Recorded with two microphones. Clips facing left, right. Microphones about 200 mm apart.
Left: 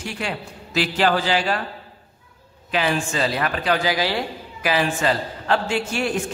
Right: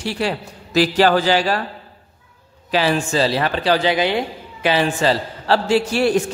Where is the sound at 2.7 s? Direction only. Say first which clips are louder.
Right 4 dB; 30° right (ahead or behind).